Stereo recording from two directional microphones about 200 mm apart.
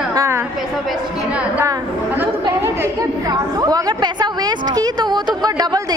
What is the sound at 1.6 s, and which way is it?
A woman's voice, 15° right (ahead or behind).